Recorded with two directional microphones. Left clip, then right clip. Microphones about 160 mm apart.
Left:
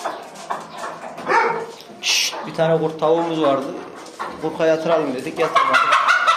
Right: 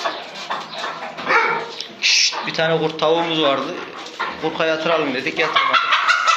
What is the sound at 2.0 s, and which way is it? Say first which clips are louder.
A man's voice: right 3 dB; 20° left (ahead or behind).